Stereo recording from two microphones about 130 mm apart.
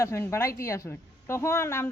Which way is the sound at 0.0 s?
20° left (ahead or behind).